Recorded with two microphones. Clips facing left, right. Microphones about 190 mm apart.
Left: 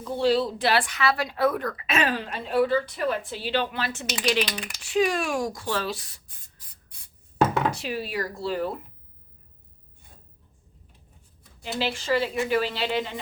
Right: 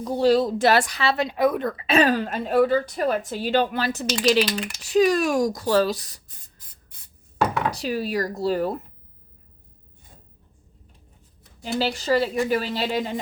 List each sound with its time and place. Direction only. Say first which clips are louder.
0.0 s speech: right 4 dB; 40° right (ahead or behind)
7.4 s speech: right 1 dB; 40° right (ahead or behind)
11.8 s speech: right 3 dB; 40° right (ahead or behind)